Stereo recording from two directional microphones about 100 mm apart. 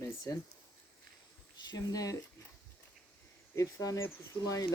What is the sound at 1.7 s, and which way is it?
Speech, 35° left (ahead or behind).